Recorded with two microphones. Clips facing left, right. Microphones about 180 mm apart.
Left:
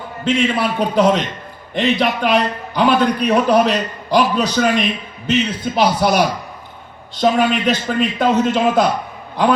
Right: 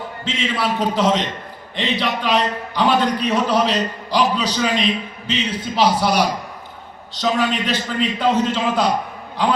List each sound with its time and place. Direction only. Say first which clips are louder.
0.3 s a man's voice: left 5 dB; 50° left (ahead or behind)